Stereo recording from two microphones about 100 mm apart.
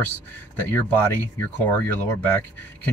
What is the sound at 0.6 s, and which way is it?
Speech, 20° left (ahead or behind).